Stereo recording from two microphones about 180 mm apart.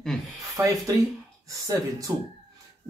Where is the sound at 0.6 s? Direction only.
15° right (ahead or behind).